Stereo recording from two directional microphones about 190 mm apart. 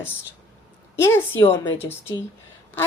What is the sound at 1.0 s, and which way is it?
Speech, 15° left (ahead or behind).